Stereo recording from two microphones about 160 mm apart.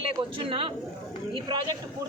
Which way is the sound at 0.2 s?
35° right (ahead or behind).